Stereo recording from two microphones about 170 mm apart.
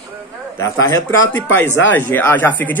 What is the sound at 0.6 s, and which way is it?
Speech, 15° left (ahead or behind).